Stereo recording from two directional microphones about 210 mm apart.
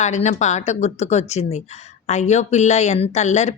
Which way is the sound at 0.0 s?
35° left (ahead or behind).